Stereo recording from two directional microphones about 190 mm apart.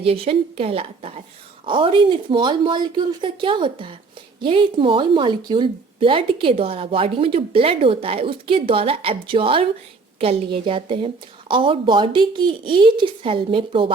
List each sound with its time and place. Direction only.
0.0 s a woman's voice: 30° right (ahead or behind)